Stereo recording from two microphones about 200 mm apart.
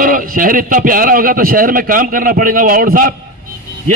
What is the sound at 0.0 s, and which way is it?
A man's voice, 45° right (ahead or behind).